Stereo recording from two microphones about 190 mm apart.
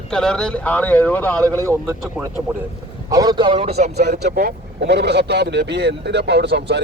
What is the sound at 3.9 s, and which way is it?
Speech, 60° right (ahead or behind).